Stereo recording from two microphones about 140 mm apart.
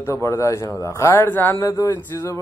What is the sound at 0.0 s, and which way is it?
A man's voice, 20° left (ahead or behind).